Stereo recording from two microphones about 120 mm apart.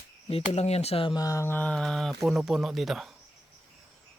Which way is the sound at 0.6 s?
65° left (ahead or behind).